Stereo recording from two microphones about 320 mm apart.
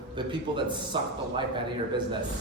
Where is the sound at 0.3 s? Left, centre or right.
Centre.